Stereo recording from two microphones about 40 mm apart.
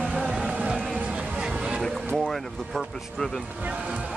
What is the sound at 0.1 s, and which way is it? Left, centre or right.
Music, right.